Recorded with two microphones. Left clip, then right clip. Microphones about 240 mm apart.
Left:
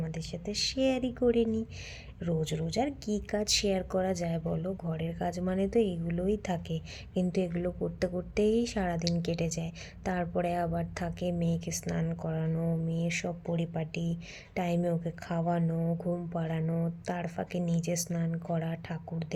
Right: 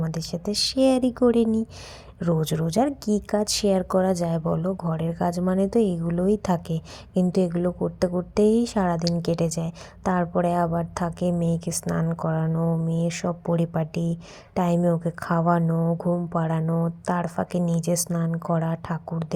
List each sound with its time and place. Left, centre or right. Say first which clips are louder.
0.1 s a woman's voice: right 9 dB; right
15.6 s speech: right 8 dB; centre
16.6 s speech: right 8 dB; centre
17.1 s a woman's voice: right 10 dB; centre